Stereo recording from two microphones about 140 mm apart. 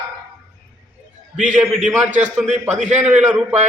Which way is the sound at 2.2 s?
55° right (ahead or behind).